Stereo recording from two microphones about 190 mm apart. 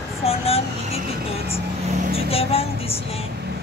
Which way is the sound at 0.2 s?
30° left (ahead or behind).